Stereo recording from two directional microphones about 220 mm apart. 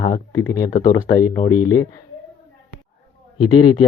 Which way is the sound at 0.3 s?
15° left (ahead or behind).